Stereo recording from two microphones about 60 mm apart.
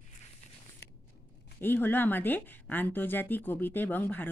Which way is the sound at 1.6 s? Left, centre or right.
Left.